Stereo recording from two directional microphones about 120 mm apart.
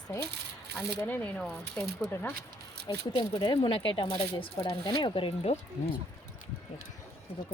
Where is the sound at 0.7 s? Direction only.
15° left (ahead or behind).